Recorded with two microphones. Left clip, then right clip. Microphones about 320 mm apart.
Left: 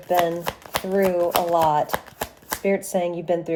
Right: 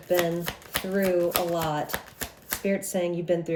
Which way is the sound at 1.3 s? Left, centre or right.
Left.